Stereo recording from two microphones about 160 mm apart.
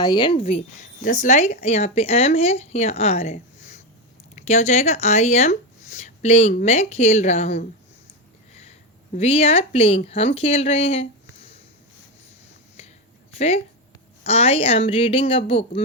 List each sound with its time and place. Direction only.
0.0 s speech: 30° left (ahead or behind)
1.0 s speech: 50° left (ahead or behind)
9.1 s speech: 40° left (ahead or behind)
13.3 s speech: 40° left (ahead or behind)